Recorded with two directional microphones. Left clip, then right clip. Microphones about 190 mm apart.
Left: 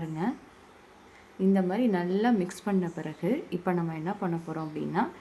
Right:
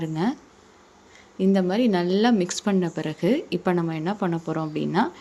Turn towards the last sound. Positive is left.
turn(degrees=-35)  # may be behind; listen again after turning